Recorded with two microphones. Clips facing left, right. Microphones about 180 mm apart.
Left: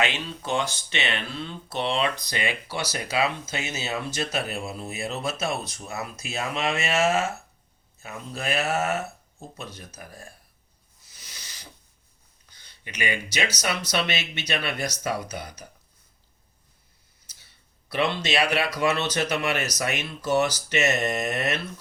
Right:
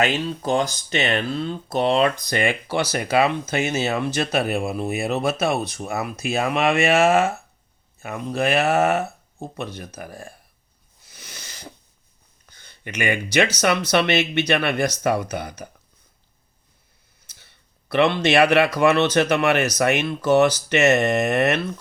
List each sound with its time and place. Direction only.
0.0 s speech: 40° right (ahead or behind); by 10.3 s 60° right (ahead or behind)
11.0 s a sound: 55° right (ahead or behind)
12.5 s speech: 50° right (ahead or behind)
17.2 s speech: 60° right (ahead or behind)